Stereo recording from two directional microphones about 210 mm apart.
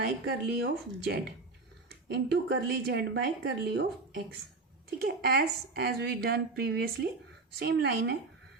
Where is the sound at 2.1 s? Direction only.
55° right (ahead or behind).